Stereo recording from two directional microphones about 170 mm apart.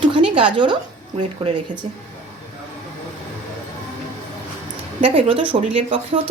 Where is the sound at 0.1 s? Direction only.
30° right (ahead or behind).